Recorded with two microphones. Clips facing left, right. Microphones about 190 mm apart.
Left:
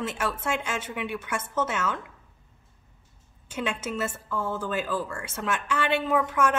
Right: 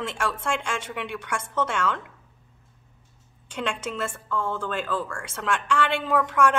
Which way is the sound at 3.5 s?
5° left (ahead or behind).